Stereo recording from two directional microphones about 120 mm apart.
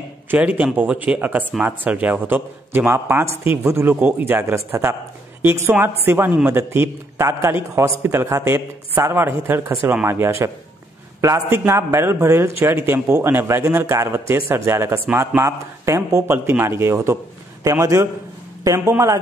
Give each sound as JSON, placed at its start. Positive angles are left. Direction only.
{"t": 0.3, "sound": "a man's voice", "side_deg": -15}
{"t": 6.0, "sound": "a man's voice", "side_deg": -15}